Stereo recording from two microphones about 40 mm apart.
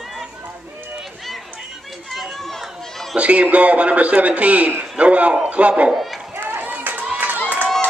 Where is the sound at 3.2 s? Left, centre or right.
Right.